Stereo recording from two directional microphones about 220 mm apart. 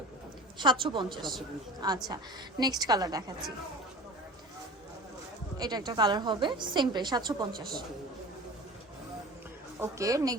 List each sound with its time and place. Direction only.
0.6 s a woman's voice: 20° right (ahead or behind)
5.5 s a woman's voice: 20° right (ahead or behind)
9.8 s a woman's voice: 15° right (ahead or behind)